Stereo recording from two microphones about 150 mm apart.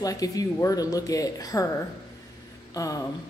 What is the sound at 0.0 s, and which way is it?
A woman's voice, 25° left (ahead or behind).